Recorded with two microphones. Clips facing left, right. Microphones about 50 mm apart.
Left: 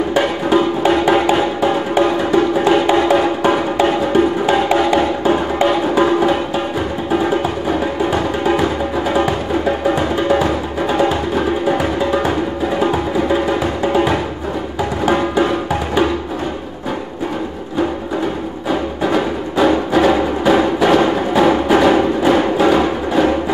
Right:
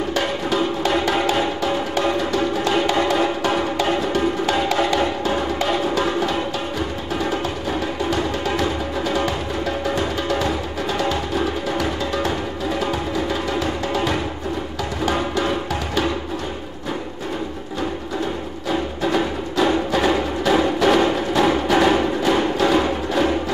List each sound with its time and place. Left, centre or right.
0.1 s music: centre
18.7 s music: centre